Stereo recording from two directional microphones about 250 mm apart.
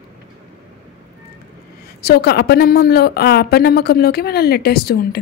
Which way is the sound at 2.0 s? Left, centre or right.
Left.